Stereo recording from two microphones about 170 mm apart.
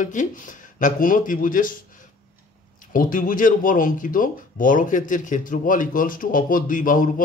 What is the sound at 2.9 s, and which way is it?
A man's voice, 55° left (ahead or behind).